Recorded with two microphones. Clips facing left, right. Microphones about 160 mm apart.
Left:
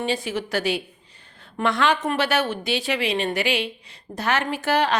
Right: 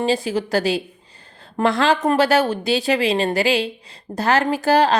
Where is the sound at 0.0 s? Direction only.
35° right (ahead or behind).